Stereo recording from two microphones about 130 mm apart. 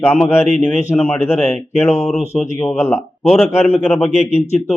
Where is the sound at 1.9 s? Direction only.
55° left (ahead or behind).